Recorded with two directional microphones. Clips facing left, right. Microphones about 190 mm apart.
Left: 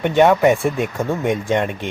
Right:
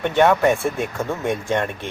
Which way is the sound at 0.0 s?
15° left (ahead or behind).